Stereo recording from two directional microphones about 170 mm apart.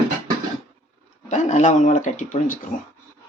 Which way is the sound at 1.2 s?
45° left (ahead or behind).